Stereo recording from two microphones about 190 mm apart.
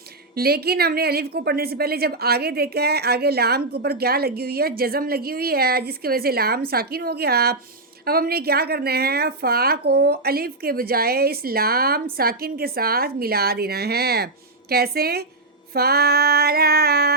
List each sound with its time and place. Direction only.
0.3 s a woman's voice: 55° right (ahead or behind)